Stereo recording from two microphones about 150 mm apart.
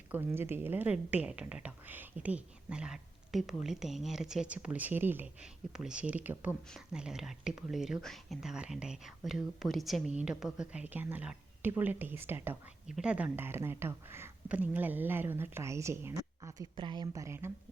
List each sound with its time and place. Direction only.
0.1 s a woman's voice: 15° right (ahead or behind)
16.7 s a woman's voice: 30° right (ahead or behind)